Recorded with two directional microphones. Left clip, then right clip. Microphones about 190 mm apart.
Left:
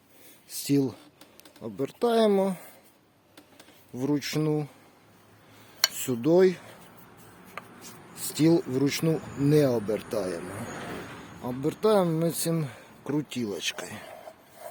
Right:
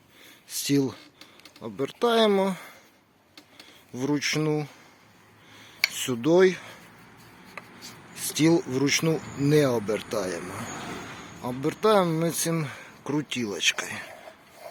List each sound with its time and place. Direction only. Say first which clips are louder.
0.5 s speech: right 1 dB; 10° left (ahead or behind)
3.9 s speech: right 2 dB; 10° left (ahead or behind)
6.0 s speech: right 2 dB; 10° left (ahead or behind)
7.5 s writing: right 1 dB; 25° left (ahead or behind)
8.1 s a sound: right 1 dB; 10° left (ahead or behind)
8.7 s speech: right 2 dB; 10° left (ahead or behind)
11.4 s speech: right 2 dB; 10° left (ahead or behind)